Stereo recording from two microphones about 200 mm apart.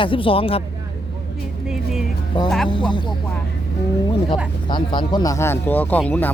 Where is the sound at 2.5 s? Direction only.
5° left (ahead or behind).